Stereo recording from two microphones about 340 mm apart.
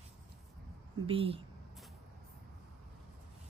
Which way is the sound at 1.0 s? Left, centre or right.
Centre.